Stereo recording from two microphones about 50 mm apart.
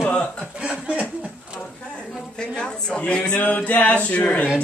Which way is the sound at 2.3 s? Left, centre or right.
Centre.